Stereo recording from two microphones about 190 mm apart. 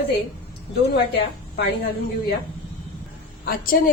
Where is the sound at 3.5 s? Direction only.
50° left (ahead or behind).